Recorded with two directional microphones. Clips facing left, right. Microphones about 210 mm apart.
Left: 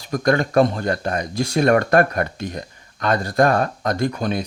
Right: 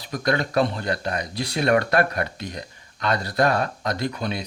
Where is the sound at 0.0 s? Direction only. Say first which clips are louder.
Left 5 dB; 45° left (ahead or behind).